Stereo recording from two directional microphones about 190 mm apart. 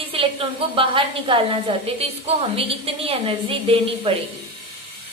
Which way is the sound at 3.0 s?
30° right (ahead or behind).